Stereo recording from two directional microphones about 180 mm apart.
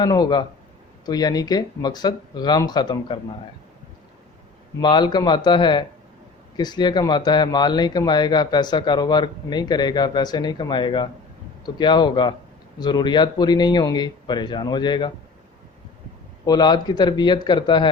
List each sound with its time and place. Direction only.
0.0 s speech: 20° left (ahead or behind)
4.8 s speech: 25° left (ahead or behind)
16.5 s speech: 25° left (ahead or behind)